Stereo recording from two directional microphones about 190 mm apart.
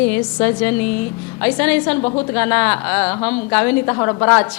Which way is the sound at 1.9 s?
30° left (ahead or behind).